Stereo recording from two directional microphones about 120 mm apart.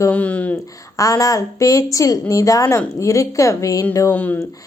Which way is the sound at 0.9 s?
25° left (ahead or behind).